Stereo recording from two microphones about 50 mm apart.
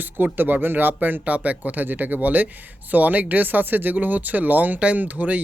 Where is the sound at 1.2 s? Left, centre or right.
Right.